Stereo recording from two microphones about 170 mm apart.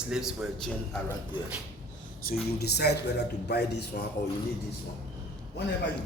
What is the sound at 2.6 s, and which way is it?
A man's voice, 70° left (ahead or behind).